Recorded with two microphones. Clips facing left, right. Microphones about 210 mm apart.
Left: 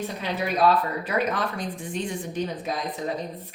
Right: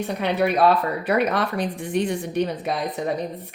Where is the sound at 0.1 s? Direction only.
65° right (ahead or behind).